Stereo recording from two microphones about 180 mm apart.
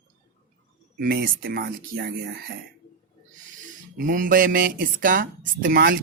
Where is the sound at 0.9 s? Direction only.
55° right (ahead or behind).